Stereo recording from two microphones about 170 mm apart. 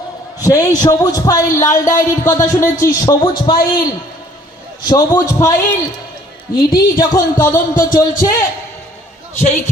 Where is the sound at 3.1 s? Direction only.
30° left (ahead or behind).